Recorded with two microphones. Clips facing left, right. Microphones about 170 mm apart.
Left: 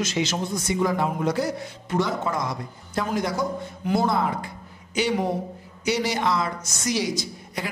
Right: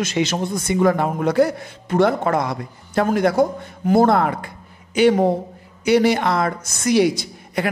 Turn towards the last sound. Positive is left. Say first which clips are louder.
# right 7 dB
turn(degrees=-60)  # may be behind; listen again after turning